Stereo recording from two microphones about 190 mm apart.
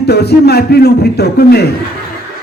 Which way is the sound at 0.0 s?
60° left (ahead or behind).